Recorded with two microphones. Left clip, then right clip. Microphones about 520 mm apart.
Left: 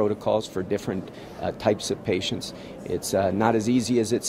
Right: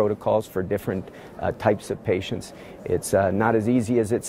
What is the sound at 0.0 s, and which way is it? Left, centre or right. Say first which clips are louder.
Speech: right 2 dB; right.